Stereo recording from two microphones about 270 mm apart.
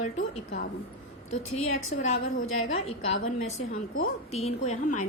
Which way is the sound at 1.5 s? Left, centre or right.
Left.